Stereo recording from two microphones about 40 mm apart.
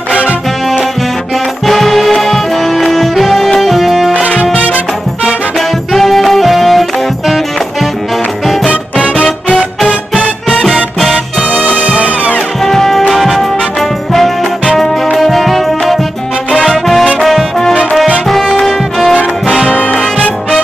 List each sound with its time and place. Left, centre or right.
0.1 s music: right
1.7 s music: centre
4.6 s music: right
5.6 s music: centre
9.8 s music: left
11.0 s music: centre
11.5 s music: right
12.6 s music: centre
13.1 s brass instrument: centre
15.1 s music: centre